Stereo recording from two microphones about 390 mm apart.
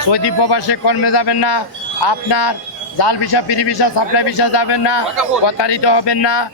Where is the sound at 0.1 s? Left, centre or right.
Left.